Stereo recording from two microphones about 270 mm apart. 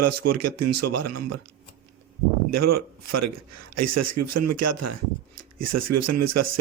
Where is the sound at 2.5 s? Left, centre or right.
Right.